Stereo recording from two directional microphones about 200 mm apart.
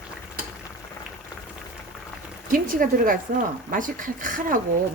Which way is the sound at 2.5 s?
45° right (ahead or behind).